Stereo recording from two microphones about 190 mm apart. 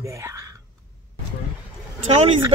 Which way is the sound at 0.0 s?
15° right (ahead or behind).